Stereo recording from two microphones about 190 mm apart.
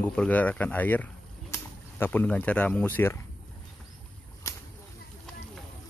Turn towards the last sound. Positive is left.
turn(degrees=15)  # may be behind; listen again after turning